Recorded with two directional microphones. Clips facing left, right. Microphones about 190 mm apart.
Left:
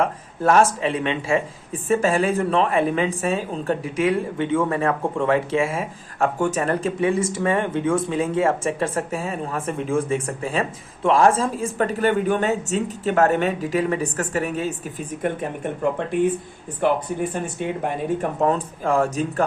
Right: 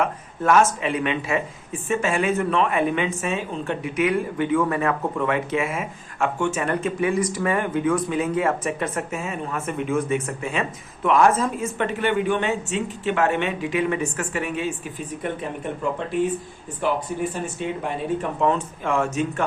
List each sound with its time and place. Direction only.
0.0 s speech: 35° left (ahead or behind)